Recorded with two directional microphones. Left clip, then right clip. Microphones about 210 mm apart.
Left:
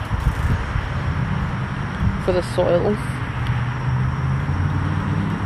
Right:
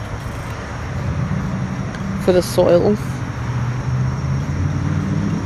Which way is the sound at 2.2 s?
30° right (ahead or behind).